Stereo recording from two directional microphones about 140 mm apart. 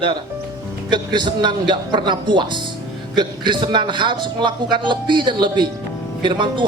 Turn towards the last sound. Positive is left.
turn(degrees=-35)  # may be behind; listen again after turning